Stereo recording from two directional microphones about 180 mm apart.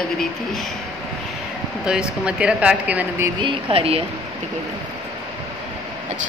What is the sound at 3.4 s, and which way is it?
Speech, 30° right (ahead or behind).